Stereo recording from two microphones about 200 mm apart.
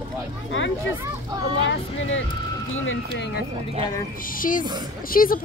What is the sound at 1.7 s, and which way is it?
Speech, 70° left (ahead or behind).